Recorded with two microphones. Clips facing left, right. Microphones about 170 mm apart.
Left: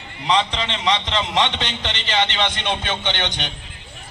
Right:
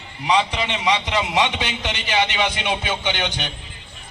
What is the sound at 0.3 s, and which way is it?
A man's voice, 10° right (ahead or behind).